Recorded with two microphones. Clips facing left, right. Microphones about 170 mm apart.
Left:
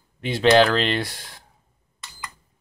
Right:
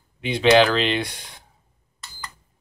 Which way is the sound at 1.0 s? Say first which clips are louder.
Right 1 dB; 20° right (ahead or behind).